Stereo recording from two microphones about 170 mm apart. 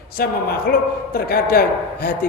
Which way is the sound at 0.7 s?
60° left (ahead or behind).